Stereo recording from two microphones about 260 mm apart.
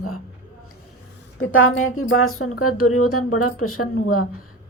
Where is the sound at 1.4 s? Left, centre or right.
Left.